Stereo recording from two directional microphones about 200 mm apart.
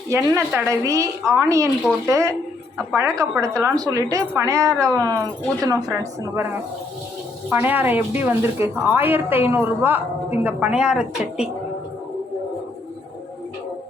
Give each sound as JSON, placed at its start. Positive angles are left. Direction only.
{"t": 0.3, "sound": "a woman's voice", "side_deg": -15}
{"t": 7.5, "sound": "a woman's voice", "side_deg": -10}